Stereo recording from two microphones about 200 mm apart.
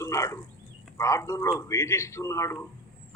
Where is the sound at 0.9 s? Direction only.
15° left (ahead or behind).